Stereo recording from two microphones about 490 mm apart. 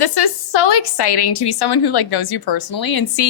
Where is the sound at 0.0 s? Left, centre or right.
Left.